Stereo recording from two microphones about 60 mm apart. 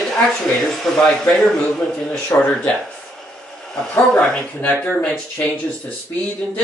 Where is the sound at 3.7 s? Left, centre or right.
Centre.